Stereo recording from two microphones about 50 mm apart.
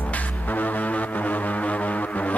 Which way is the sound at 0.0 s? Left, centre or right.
Left.